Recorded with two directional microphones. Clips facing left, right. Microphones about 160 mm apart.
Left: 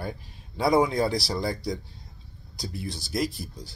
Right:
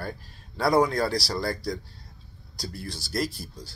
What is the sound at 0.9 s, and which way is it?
Speech, 20° left (ahead or behind).